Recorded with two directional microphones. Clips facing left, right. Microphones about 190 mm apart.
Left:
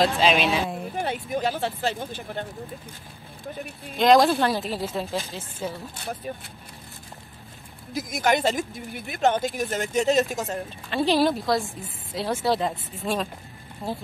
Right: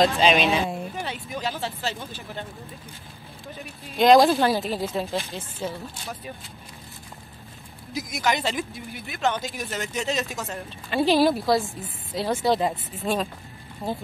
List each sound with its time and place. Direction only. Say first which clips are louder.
0.0 s a woman's voice: right 1 dB; centre (ahead or behind)
0.9 s speech: left 5 dB; 50° left (ahead or behind)
3.9 s a woman's voice: right 2 dB; centre (ahead or behind)
6.0 s speech: left 4 dB; 55° left (ahead or behind)
7.9 s speech: left 3 dB; 50° left (ahead or behind)
10.9 s a woman's voice: right 2 dB; centre (ahead or behind)